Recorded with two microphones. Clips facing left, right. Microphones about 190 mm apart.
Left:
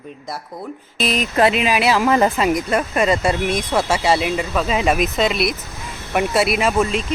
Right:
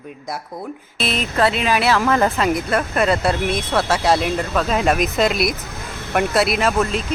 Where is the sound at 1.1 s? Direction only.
15° left (ahead or behind).